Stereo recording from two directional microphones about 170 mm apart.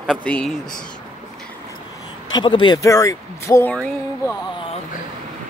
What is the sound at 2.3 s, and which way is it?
Speech, 30° left (ahead or behind).